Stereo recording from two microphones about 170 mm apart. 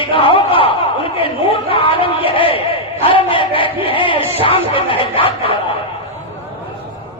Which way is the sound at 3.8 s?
30° left (ahead or behind).